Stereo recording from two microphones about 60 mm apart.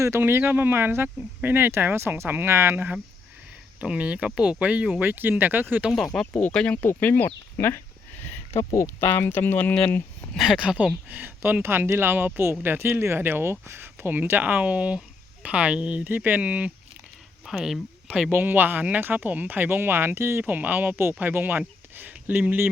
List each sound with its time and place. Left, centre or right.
0.2 s speech: right
3.8 s speech: right
6.1 s speech: centre
6.8 s speech: left
8.7 s speech: left
9.0 s speech: left
10.3 s speech: centre
11.1 s speech: right
11.6 s speech: right; by 16.7 s centre
17.4 s speech: centre
18.3 s speech: right
20.4 s speech: right